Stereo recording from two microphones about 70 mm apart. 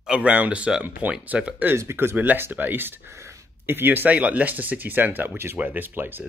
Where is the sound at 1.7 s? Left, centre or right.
Right.